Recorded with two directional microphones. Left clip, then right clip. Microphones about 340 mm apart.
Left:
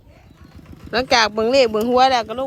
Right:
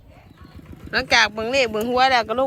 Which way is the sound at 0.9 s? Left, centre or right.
Centre.